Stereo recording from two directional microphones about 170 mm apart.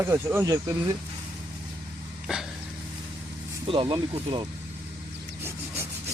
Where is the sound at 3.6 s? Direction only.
30° right (ahead or behind).